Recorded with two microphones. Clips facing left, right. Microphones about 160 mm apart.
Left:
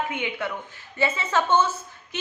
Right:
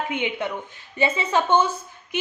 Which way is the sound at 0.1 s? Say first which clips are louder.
Right 3 dB; 20° right (ahead or behind).